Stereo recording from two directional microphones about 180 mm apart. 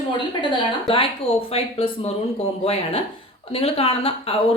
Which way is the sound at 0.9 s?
30° left (ahead or behind).